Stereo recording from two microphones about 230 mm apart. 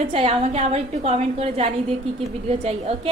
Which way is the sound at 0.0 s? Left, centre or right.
Right.